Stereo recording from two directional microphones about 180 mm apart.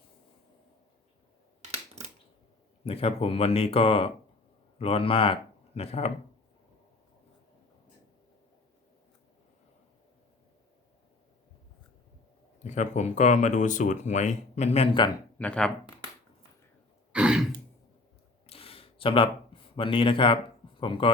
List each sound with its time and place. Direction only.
2.8 s speech: 35° left (ahead or behind)
12.6 s speech: 40° left (ahead or behind)
15.4 s speech: 5° left (ahead or behind)
17.1 s throat clearing: 5° right (ahead or behind)
18.4 s a sound: 30° left (ahead or behind)
20.8 s speech: 30° left (ahead or behind)